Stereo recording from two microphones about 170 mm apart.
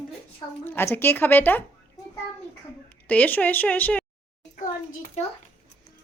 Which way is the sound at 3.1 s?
10° left (ahead or behind).